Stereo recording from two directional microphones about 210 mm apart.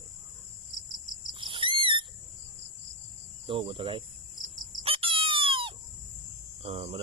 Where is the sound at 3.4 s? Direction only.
25° right (ahead or behind).